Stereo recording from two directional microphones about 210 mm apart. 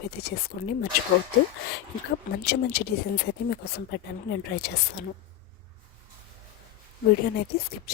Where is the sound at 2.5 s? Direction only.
50° left (ahead or behind).